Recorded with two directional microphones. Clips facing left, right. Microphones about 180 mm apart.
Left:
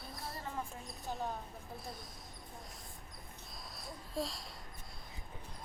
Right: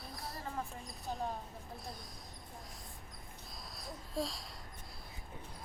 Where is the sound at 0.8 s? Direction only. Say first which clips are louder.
Right 1 dB; centre (ahead or behind).